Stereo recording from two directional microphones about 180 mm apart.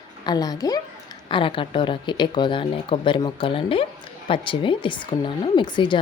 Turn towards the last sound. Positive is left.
turn(degrees=25)  # may be behind; listen again after turning